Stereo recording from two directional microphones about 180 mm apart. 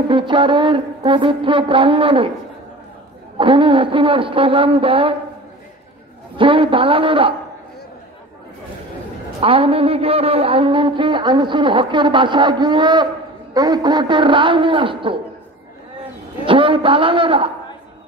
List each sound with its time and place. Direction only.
0.1 s a man's voice: 25° right (ahead or behind)
3.3 s a man's voice: 30° right (ahead or behind)
6.3 s a man's voice: 30° right (ahead or behind)
9.4 s a man's voice: 30° right (ahead or behind)
16.4 s a man's voice: 30° right (ahead or behind)